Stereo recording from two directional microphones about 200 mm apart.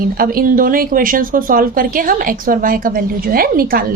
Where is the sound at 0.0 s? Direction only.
45° right (ahead or behind).